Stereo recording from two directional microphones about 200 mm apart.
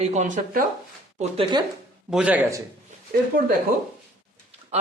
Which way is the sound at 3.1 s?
45° right (ahead or behind).